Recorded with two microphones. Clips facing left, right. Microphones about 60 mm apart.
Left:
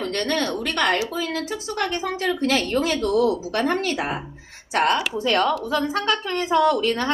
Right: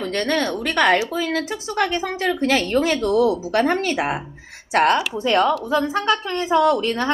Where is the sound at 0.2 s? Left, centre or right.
Centre.